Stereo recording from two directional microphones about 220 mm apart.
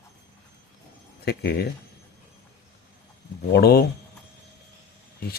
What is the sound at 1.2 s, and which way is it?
Speech, 45° left (ahead or behind).